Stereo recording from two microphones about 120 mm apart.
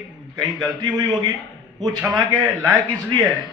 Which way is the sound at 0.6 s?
35° right (ahead or behind).